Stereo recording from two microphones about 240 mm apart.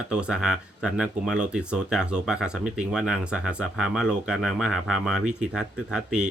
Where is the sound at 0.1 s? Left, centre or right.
Centre.